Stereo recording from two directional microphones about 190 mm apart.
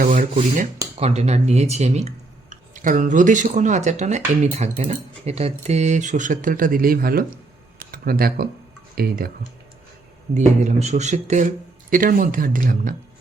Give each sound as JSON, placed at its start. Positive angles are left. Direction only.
{"t": 0.0, "sound": "rub", "side_deg": -45}
{"t": 0.9, "sound": "speech", "side_deg": -35}
{"t": 10.3, "sound": "speech", "side_deg": -40}